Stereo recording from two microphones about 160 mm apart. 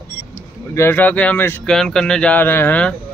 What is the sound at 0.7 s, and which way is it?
Speech, 10° left (ahead or behind).